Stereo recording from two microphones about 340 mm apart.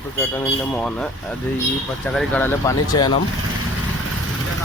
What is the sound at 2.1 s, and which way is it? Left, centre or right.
Speech, centre.